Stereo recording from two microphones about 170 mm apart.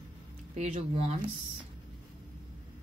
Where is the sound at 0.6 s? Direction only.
40° right (ahead or behind).